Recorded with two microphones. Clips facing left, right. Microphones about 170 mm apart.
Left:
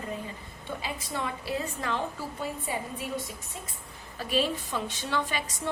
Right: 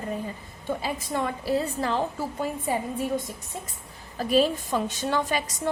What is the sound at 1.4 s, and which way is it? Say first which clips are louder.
Speech: right 6 dB; 35° right (ahead or behind).